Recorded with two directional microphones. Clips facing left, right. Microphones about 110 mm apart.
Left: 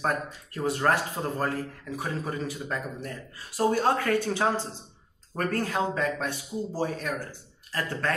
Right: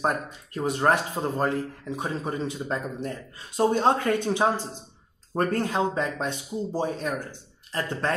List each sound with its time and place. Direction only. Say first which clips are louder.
0.0 s speech: right 2 dB; 20° right (ahead or behind)